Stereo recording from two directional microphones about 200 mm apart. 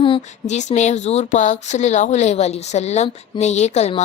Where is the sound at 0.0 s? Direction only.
30° left (ahead or behind).